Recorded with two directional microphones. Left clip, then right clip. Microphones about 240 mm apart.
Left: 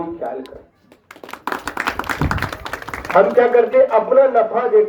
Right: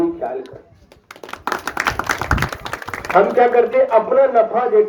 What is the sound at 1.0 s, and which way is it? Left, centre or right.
Clapping, right.